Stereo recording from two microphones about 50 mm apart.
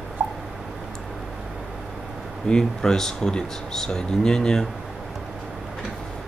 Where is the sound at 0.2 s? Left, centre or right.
Right.